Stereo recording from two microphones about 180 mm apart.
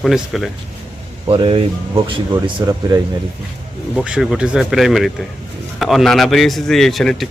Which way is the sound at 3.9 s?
5° right (ahead or behind).